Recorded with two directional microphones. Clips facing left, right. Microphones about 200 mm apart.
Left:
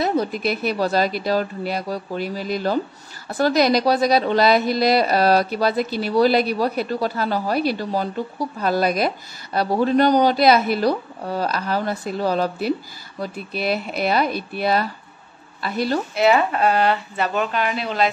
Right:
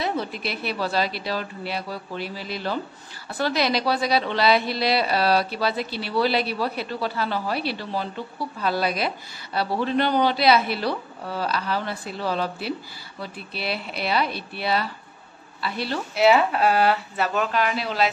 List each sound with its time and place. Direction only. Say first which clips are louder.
0.0 s a woman's voice: left 6 dB; 45° left (ahead or behind)
16.2 s speech: even; 5° right (ahead or behind)